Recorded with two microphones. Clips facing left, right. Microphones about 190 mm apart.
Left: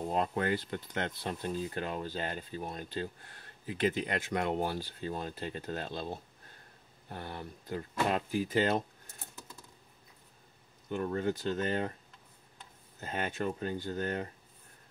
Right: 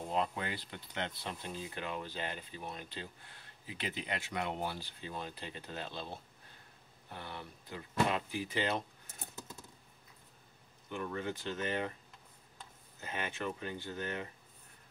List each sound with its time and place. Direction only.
0.1 s speech: 45° left (ahead or behind)
11.0 s speech: 40° left (ahead or behind)
13.0 s speech: 45° left (ahead or behind)